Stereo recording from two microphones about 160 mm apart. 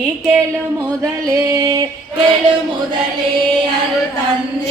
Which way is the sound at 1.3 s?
20° right (ahead or behind).